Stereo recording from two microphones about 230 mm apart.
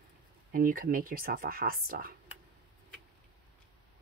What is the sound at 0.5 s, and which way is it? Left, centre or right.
Speech, right.